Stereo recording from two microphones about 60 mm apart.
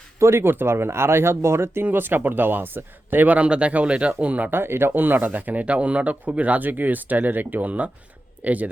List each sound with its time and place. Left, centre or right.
0.2 s speech: right
3.3 s speech: centre
4.5 s speech: right